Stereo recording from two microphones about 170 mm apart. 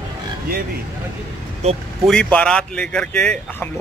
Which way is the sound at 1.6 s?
40° right (ahead or behind).